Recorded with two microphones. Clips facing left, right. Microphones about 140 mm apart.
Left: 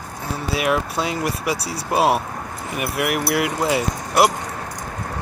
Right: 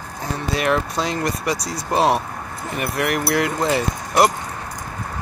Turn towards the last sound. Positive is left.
turn(degrees=5)  # may be behind; listen again after turning